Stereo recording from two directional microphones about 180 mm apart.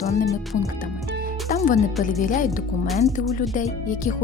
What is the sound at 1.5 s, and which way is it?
Music, 40° left (ahead or behind).